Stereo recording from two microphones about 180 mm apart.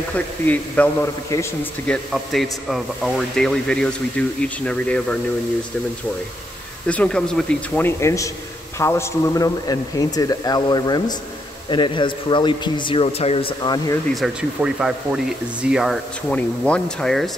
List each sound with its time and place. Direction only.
0.1 s a man's voice: 10° left (ahead or behind)
6.9 s a man's voice: 5° left (ahead or behind); by 13.9 s 25° left (ahead or behind)
14.1 s a man's voice: centre (ahead or behind)